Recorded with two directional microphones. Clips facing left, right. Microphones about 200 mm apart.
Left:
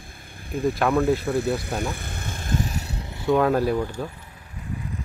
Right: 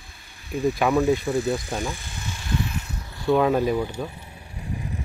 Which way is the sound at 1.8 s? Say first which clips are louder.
Left 1 dB; 60° left (ahead or behind).